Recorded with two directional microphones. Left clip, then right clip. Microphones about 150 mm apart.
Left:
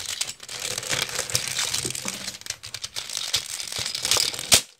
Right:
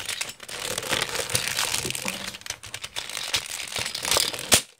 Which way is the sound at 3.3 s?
20° right (ahead or behind).